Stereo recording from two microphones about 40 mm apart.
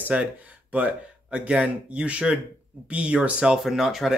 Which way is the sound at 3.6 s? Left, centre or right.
Centre.